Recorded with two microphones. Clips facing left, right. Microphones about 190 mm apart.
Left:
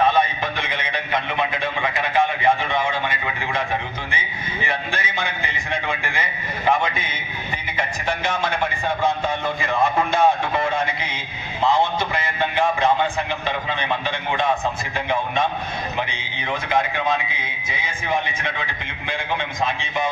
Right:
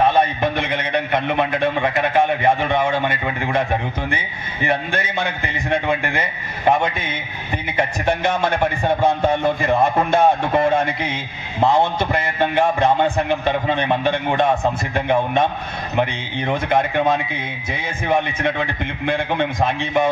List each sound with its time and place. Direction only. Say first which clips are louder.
0.4 s a man's voice: right 6 dB; 55° right (ahead or behind)
4.6 s a man's voice: right 7 dB; 55° right (ahead or behind)
7.7 s a man's voice: right 6 dB; 55° right (ahead or behind)